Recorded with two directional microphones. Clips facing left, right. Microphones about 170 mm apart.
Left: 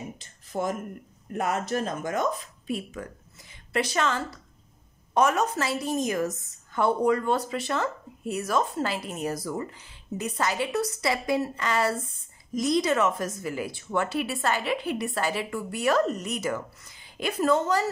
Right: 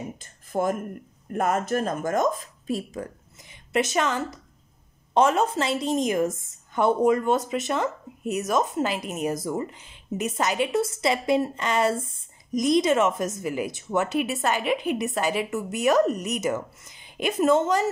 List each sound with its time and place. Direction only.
0.2 s a sound: 50° right (ahead or behind)
1.3 s speech: 50° right (ahead or behind)
3.7 s a woman's voice: 20° right (ahead or behind)